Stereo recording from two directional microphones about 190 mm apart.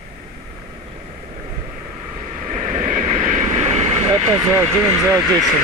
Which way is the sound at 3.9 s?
15° right (ahead or behind).